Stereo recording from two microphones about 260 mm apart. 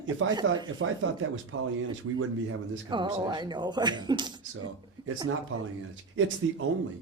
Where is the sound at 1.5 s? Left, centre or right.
Right.